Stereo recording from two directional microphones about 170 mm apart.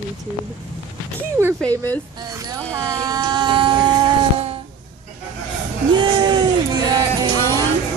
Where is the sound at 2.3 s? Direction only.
20° right (ahead or behind).